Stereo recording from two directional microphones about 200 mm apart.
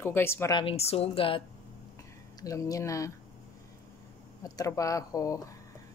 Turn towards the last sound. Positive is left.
turn(degrees=15)  # may be behind; listen again after turning